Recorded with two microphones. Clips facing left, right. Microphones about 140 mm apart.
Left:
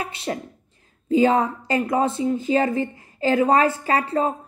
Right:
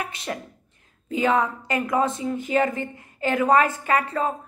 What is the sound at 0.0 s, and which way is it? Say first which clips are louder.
Speech: left 3 dB; 30° left (ahead or behind).